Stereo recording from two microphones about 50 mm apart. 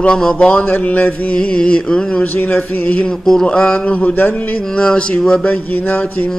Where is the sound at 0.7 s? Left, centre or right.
Left.